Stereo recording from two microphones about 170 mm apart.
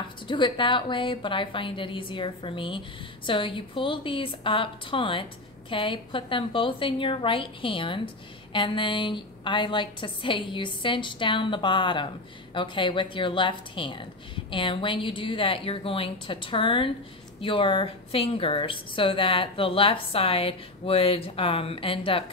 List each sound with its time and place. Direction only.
0.3 s a woman's voice: 30° left (ahead or behind)